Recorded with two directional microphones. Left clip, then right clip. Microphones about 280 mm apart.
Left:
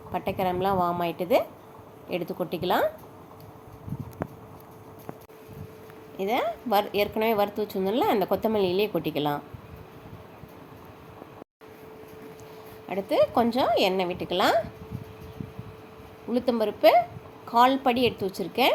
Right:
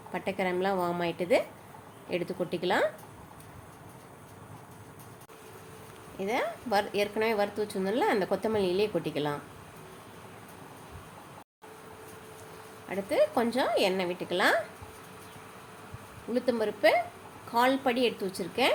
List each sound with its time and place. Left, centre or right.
0.1 s a woman's voice: centre
6.1 s a woman's voice: centre
12.9 s a woman's voice: centre
16.3 s a woman's voice: centre